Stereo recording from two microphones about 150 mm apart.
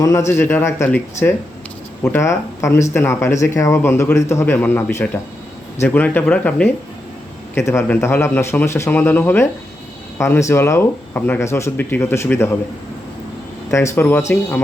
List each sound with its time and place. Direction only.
0.0 s speech: 20° left (ahead or behind)
2.0 s speech: 15° left (ahead or behind)
13.7 s speech: 20° left (ahead or behind)